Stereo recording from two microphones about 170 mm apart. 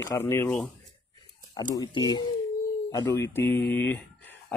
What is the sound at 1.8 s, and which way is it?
Speech, 25° left (ahead or behind).